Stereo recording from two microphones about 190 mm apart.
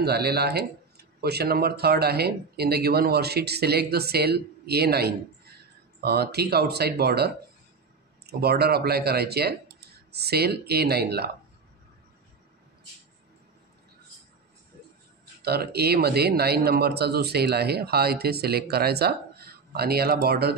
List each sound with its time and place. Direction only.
0.0 s speech: 55° right (ahead or behind)
15.4 s speech: 55° right (ahead or behind)